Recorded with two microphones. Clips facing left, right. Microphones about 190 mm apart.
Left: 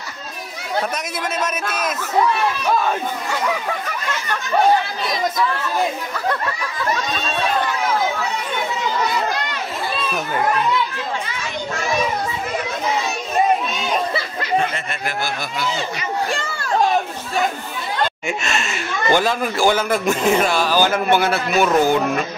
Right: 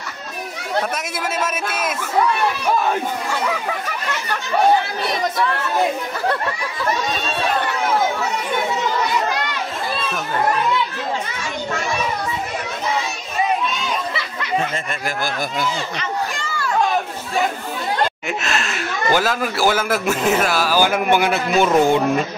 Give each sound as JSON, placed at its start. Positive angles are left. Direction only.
{"t": 1.4, "sound": "a man's voice", "side_deg": -5}
{"t": 18.2, "sound": "a man's voice", "side_deg": 0}